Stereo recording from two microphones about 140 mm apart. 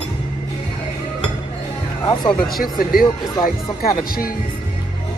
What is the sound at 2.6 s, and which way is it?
Speech, 90° left.